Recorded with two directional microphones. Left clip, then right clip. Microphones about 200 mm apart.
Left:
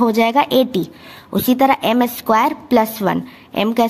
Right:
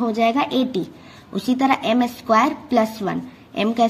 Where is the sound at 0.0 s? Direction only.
40° left (ahead or behind).